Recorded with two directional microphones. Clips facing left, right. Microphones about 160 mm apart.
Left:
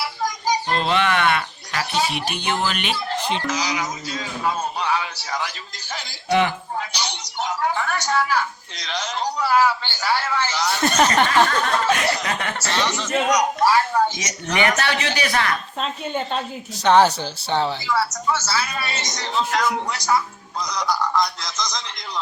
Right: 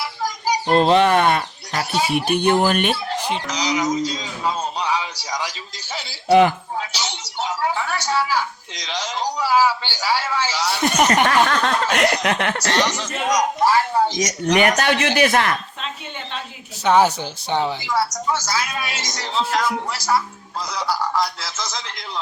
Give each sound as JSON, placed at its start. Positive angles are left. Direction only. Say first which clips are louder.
{"t": 0.8, "sound": "speech", "louder": "right 9 dB", "side_deg": -40}
{"t": 1.9, "sound": "a woman's voice", "louder": "right 1 dB", "side_deg": -10}
{"t": 2.1, "sound": "speech", "louder": "right 8 dB", "side_deg": -55}
{"t": 3.2, "sound": "a woman's voice", "louder": "even", "side_deg": -10}
{"t": 6.2, "sound": "a man's voice", "louder": "right 6 dB", "side_deg": -40}
{"t": 6.9, "sound": "a sound", "louder": "even", "side_deg": -5}
{"t": 8.8, "sound": "a woman's voice", "louder": "right 1 dB", "side_deg": -10}
{"t": 11.3, "sound": "snicker", "louder": "right 1 dB", "side_deg": -75}
{"t": 12.8, "sound": "a woman's voice", "louder": "left 1 dB", "side_deg": -15}
{"t": 14.2, "sound": "speech", "louder": "right 5 dB", "side_deg": -40}
{"t": 15.8, "sound": "speech", "louder": "left 6 dB", "side_deg": 45}
{"t": 16.8, "sound": "a woman's voice", "louder": "left 1 dB", "side_deg": -10}